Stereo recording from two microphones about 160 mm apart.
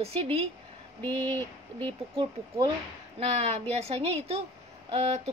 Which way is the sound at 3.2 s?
40° right (ahead or behind).